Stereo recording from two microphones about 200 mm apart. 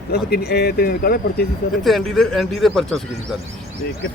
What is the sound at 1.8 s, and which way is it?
Speech, centre (ahead or behind).